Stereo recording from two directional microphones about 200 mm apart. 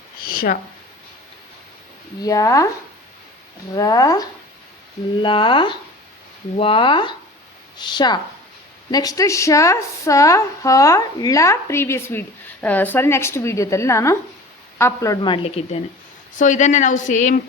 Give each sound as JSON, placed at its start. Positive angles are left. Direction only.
{"t": 0.3, "sound": "speech", "side_deg": 45}
{"t": 2.2, "sound": "a woman's voice", "side_deg": 15}
{"t": 3.8, "sound": "a woman's voice", "side_deg": 20}